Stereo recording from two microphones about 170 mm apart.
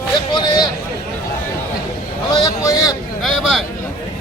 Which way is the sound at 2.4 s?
20° left (ahead or behind).